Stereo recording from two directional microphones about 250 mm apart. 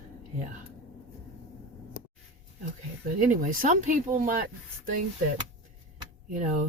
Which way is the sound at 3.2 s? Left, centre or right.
Right.